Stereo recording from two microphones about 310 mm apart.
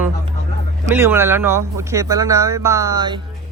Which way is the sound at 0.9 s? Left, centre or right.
Centre.